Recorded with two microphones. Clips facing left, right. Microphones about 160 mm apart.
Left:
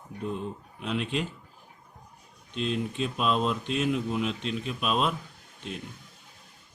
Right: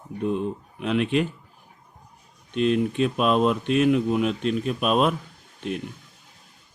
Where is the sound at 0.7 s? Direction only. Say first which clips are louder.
Right 8 dB; 65° right (ahead or behind).